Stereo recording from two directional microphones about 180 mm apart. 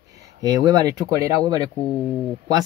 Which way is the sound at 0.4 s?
20° right (ahead or behind).